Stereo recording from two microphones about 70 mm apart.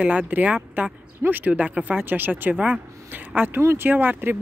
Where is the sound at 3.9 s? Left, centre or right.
Right.